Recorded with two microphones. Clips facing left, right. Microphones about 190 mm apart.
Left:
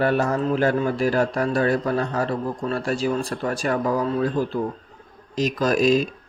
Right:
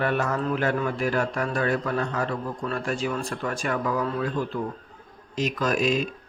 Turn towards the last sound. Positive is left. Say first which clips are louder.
# left 5 dB
turn(degrees=35)  # may be behind; listen again after turning